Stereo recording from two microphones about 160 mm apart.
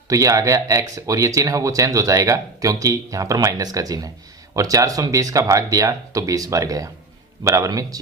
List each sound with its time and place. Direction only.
0.1 s speech: 20° right (ahead or behind)